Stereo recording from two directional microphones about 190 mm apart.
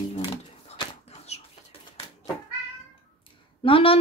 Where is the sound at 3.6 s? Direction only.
30° left (ahead or behind).